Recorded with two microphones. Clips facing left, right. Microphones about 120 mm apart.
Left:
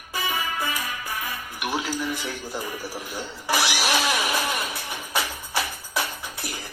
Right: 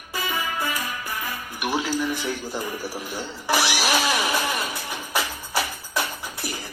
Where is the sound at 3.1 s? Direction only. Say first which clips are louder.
Right 2 dB; 25° right (ahead or behind).